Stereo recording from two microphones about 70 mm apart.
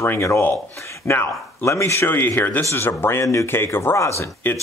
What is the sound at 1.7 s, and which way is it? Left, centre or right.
Speech, left.